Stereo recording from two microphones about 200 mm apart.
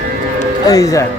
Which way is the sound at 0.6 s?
15° left (ahead or behind).